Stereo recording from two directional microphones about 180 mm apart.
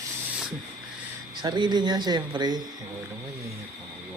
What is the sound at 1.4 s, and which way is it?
Speech, 25° right (ahead or behind).